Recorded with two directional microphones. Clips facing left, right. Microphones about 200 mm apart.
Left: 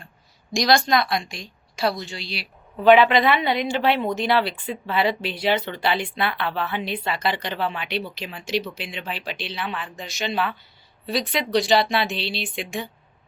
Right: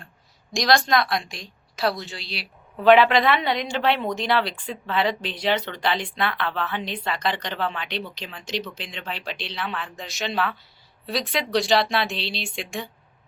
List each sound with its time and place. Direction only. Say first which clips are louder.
0.5 s a woman's voice: left 1 dB; centre (ahead or behind)